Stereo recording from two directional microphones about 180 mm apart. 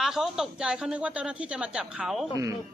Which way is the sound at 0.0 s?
Centre (ahead or behind).